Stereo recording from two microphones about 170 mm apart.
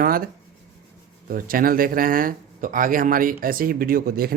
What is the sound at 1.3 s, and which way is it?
Speech, 55° right (ahead or behind).